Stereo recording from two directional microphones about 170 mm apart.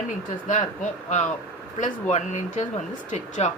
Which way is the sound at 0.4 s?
45° left (ahead or behind).